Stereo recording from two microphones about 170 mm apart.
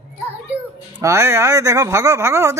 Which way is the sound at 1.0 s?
15° right (ahead or behind).